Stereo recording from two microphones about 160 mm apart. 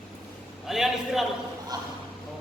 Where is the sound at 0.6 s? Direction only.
Centre (ahead or behind).